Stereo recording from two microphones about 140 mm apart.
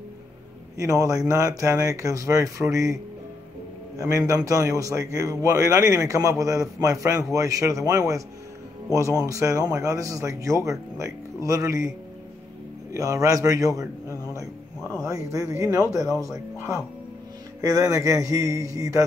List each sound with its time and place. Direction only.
0.7 s a man's voice: 25° right (ahead or behind)
4.0 s a man's voice: 25° right (ahead or behind)
12.9 s a man's voice: 25° right (ahead or behind)